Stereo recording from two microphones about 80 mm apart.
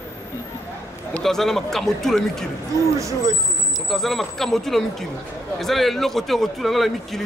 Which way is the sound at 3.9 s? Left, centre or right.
Centre.